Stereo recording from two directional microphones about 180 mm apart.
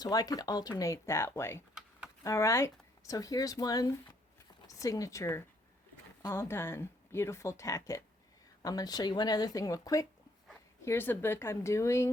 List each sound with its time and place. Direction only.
0.0 s speech: 20° left (ahead or behind)